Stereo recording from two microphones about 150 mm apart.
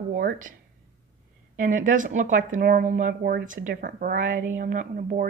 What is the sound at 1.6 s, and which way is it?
Speech, 60° right (ahead or behind).